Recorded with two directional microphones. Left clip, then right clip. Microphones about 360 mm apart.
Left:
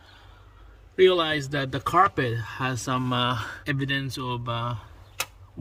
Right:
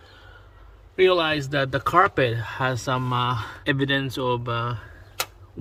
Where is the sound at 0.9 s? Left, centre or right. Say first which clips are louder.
Right 1 dB; centre.